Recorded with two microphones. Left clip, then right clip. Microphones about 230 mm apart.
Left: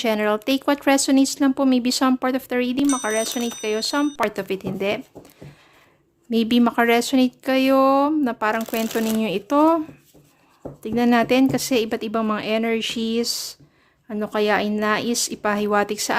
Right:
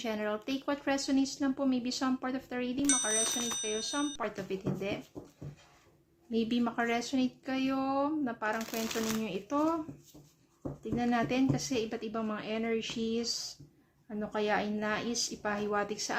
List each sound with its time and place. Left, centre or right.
0.0 s speech: left
6.3 s speech: left
10.9 s speech: left